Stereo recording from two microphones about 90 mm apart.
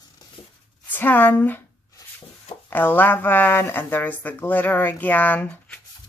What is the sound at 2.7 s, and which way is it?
Speech, 20° left (ahead or behind).